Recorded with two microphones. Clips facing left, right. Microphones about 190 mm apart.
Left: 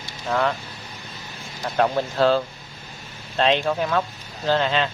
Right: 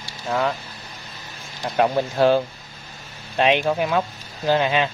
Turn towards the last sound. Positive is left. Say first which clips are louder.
# right 2 dB
turn(degrees=-15)  # may be behind; listen again after turning